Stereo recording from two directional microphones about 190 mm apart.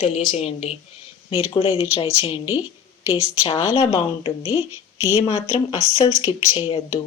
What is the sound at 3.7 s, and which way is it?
A woman's voice, 30° left (ahead or behind).